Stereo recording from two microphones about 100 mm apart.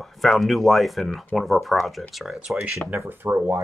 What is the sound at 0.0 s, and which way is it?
Speech, centre (ahead or behind).